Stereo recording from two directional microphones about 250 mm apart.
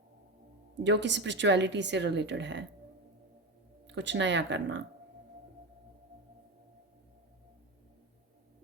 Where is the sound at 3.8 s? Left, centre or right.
Right.